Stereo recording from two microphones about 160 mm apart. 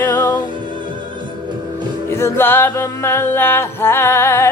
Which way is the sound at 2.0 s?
15° left (ahead or behind).